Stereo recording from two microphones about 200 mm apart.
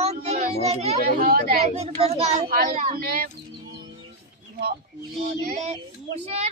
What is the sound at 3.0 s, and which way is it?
Speech, 50° right (ahead or behind).